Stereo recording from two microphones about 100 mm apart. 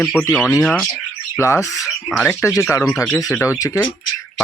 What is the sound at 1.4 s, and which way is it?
Speech, 30° left (ahead or behind).